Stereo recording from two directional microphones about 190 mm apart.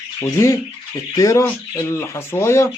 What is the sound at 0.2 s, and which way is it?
Speech, 15° left (ahead or behind).